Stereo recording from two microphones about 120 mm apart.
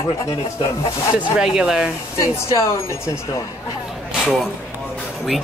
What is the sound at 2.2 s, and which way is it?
Speech, 25° left (ahead or behind).